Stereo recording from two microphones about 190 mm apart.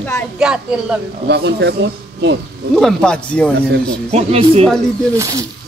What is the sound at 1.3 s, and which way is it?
Speech, 60° right (ahead or behind).